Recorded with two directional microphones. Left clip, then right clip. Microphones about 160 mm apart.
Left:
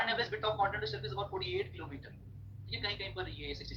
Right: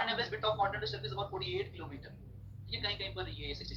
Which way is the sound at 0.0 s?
30° left (ahead or behind).